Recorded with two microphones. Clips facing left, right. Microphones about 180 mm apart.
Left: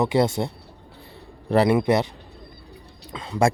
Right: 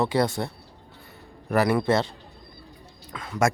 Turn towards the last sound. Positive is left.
turn(degrees=25)  # may be behind; listen again after turning